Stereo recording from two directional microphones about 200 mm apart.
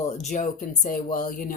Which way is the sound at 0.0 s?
35° left (ahead or behind).